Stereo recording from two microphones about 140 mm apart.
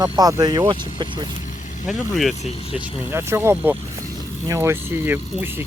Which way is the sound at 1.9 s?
Centre (ahead or behind).